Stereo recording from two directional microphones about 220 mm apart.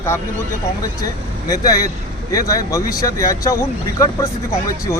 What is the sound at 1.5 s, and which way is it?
A man's voice, 15° left (ahead or behind).